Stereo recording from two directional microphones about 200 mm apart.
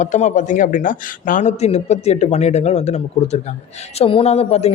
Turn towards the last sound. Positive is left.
turn(degrees=30)  # may be behind; listen again after turning